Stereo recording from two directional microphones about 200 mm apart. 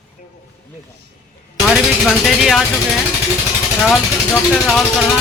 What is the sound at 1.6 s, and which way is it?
Speech, centre (ahead or behind).